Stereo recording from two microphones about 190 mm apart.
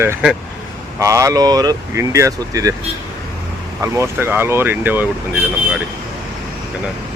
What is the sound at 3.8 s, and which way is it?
Speech, 15° right (ahead or behind).